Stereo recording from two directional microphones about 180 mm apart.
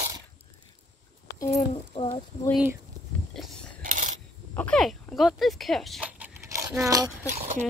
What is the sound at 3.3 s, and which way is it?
Mechanisms, centre (ahead or behind).